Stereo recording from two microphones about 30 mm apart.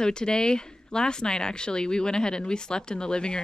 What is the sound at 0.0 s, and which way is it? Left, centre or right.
Speech, left.